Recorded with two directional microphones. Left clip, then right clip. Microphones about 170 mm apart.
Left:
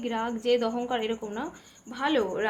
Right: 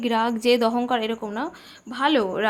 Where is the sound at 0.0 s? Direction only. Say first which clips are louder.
Right 8 dB; 45° right (ahead or behind).